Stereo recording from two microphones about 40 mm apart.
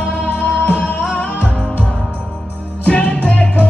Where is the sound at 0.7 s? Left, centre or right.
Left.